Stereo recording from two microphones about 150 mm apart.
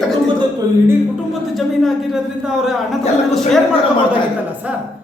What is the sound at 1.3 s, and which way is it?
Speech, centre (ahead or behind).